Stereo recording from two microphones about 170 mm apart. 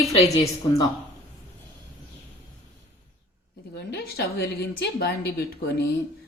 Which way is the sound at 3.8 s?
70° left (ahead or behind).